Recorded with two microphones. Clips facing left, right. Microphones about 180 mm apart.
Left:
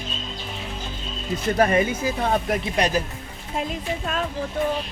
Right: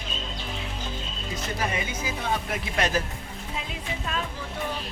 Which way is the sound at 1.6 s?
55° left (ahead or behind).